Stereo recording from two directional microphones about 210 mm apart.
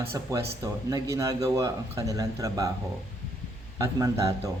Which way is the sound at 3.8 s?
15° right (ahead or behind).